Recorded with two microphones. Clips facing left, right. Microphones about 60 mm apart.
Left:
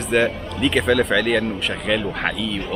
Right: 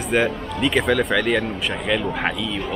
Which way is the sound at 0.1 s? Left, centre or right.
Centre.